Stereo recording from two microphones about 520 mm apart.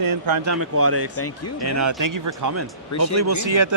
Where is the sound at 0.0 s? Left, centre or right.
Right.